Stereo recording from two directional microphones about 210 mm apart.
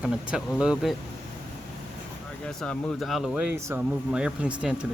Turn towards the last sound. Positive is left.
turn(degrees=-5)  # may be behind; listen again after turning